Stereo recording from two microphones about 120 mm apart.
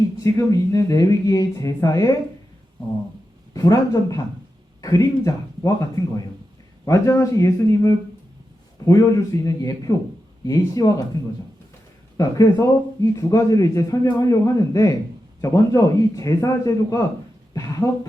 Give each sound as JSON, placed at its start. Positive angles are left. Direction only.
{"t": 0.2, "sound": "speech", "side_deg": 30}
{"t": 3.5, "sound": "speech", "side_deg": 30}
{"t": 12.1, "sound": "speech", "side_deg": 35}